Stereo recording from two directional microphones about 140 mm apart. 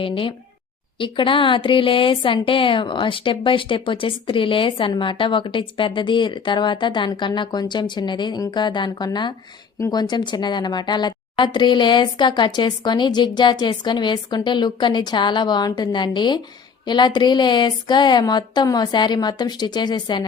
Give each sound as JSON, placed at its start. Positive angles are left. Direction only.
{"t": 0.0, "sound": "a woman's voice", "side_deg": 40}